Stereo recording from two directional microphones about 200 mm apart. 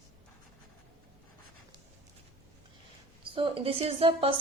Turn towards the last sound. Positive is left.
turn(degrees=-30)  # may be behind; listen again after turning